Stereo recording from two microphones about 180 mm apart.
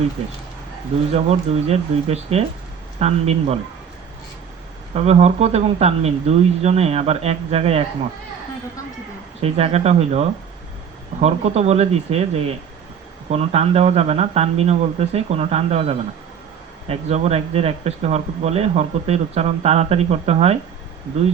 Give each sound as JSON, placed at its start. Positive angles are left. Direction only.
{"t": 1.1, "sound": "speech", "side_deg": -35}
{"t": 4.9, "sound": "speech", "side_deg": -35}
{"t": 9.4, "sound": "speech", "side_deg": -35}